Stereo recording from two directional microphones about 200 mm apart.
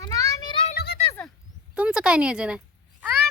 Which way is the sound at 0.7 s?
55° left (ahead or behind).